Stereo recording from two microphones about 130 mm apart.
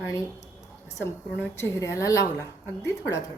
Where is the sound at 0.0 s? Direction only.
25° left (ahead or behind).